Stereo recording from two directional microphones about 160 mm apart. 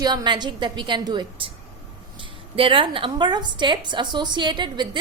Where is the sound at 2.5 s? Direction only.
35° right (ahead or behind).